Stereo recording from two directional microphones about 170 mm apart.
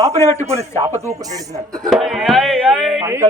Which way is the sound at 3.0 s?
15° right (ahead or behind).